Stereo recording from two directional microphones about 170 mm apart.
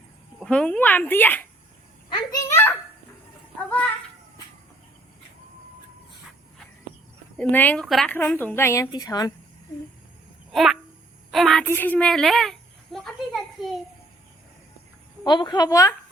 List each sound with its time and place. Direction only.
0.3 s a woman's voice: 5° left (ahead or behind)
7.3 s a woman's voice: 10° left (ahead or behind)
10.5 s a woman's voice: centre (ahead or behind)
11.6 s a child's voice: 10° left (ahead or behind)
15.2 s a woman's voice: 25° left (ahead or behind)